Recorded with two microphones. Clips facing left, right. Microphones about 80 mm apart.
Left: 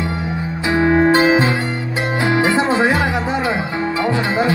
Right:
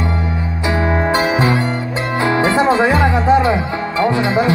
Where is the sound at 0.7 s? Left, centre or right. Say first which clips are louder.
Left 3 dB; left.